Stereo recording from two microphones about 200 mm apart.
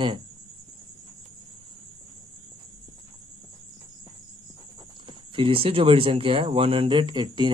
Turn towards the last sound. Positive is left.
turn(degrees=-20)  # may be behind; listen again after turning